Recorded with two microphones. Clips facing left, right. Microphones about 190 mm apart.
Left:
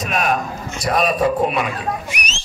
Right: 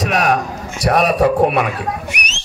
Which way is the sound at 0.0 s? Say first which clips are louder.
Right 4 dB; 75° right (ahead or behind).